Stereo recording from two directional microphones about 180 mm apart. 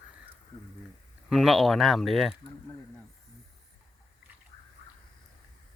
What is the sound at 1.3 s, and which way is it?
Speech, centre (ahead or behind).